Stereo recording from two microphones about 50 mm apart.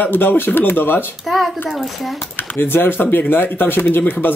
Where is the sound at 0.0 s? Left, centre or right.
Left.